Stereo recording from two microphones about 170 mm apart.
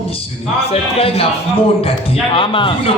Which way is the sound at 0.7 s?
35° left (ahead or behind).